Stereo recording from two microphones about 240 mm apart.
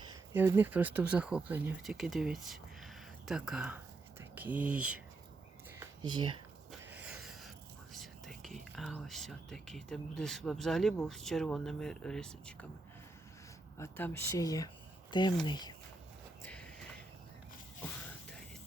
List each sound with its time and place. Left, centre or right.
0.1 s speech: centre
5.8 s a sound: centre
6.7 s a sound: centre
7.9 s whispering: centre
8.7 s speech: centre
13.7 s speech: centre